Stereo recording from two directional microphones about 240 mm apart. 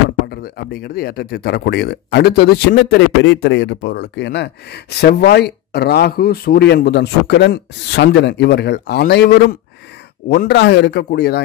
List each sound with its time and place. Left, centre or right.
0.4 s speech: left